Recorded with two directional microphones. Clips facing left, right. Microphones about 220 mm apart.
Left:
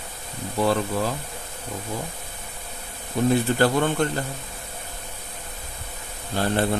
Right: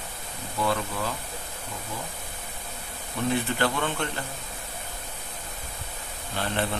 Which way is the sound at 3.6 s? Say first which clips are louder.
Left 7 dB; 40° left (ahead or behind).